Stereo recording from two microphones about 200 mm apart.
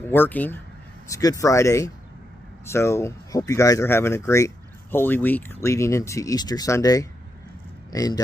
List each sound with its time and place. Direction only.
0.1 s speech: 10° left (ahead or behind)